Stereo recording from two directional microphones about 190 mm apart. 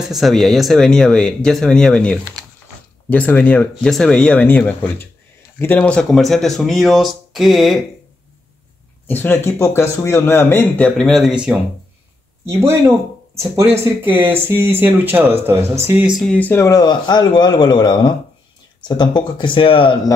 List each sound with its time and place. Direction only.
0.1 s speech: centre (ahead or behind)
9.0 s speech: 10° left (ahead or behind)
13.3 s speech: 15° right (ahead or behind); by 20.0 s 30° left (ahead or behind)